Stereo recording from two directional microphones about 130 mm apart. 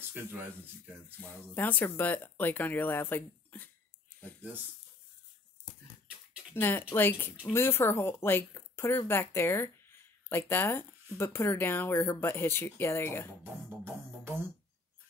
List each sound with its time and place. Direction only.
1.0 s speech: 15° left (ahead or behind)
6.5 s speech: 15° left (ahead or behind)